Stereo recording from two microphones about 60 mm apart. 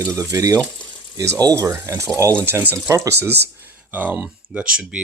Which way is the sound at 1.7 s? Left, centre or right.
Right.